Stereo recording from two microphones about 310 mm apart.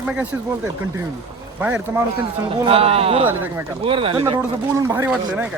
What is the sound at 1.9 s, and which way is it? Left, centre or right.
Speech, centre.